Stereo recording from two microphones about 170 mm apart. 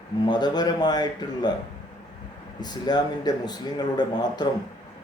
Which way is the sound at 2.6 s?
25° left (ahead or behind).